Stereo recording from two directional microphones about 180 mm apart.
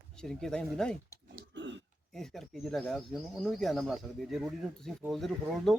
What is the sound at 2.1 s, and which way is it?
Speech, centre (ahead or behind).